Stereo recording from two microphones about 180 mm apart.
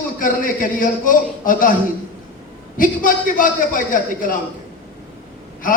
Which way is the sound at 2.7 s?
50° left (ahead or behind).